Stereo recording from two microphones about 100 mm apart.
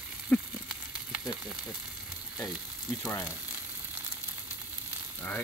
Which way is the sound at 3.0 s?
25° left (ahead or behind).